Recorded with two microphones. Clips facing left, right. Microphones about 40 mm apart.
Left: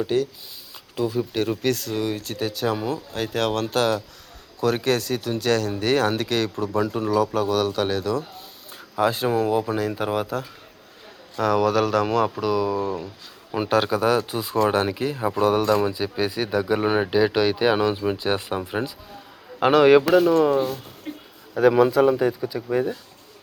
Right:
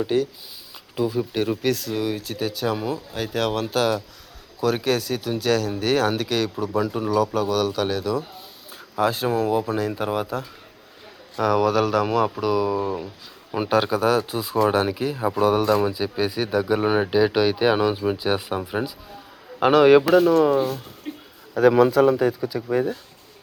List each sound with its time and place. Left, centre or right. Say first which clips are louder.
0.0 s speech: right 1 dB; centre